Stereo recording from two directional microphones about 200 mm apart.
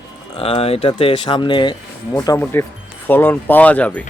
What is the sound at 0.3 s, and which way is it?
Speech, 30° left (ahead or behind).